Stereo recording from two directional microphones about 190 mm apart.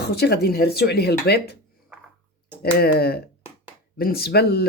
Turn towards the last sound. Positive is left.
turn(degrees=55)  # may be behind; listen again after turning